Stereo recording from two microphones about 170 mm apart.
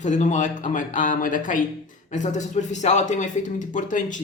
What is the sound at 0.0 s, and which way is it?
Speech, 45° left (ahead or behind).